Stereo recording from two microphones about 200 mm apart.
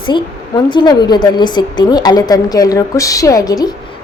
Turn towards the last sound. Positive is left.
turn(degrees=20)  # may be behind; listen again after turning